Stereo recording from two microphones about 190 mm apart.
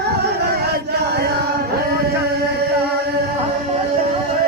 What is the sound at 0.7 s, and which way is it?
Chant, 55° right (ahead or behind).